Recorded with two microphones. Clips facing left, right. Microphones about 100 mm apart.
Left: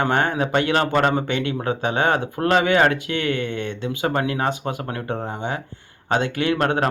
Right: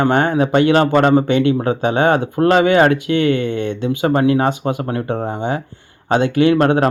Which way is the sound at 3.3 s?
50° left (ahead or behind).